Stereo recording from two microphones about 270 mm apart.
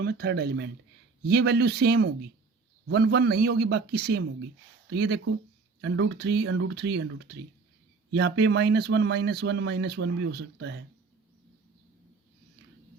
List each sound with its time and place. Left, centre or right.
0.0 s speech: right